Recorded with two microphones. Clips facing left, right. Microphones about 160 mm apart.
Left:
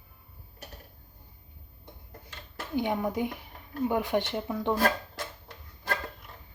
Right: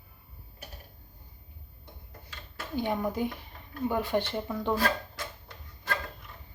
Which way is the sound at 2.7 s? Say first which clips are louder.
Left 1 dB; 15° left (ahead or behind).